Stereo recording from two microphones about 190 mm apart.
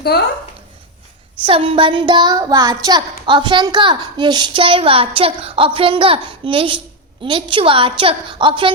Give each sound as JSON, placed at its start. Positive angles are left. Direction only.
{"t": 1.5, "sound": "a woman's voice", "side_deg": -30}